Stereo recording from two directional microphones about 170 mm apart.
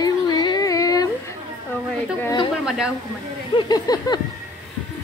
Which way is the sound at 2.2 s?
25° left (ahead or behind).